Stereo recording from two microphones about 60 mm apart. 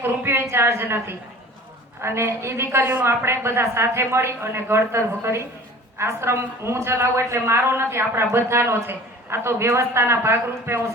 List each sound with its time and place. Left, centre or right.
0.0 s a woman's voice: right